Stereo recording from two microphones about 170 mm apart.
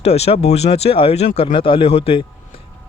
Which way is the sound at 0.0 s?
35° left (ahead or behind).